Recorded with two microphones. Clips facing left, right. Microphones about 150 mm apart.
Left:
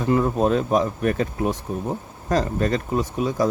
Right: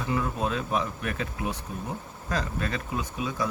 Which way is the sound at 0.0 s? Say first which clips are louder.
Left 9 dB; 45° left (ahead or behind).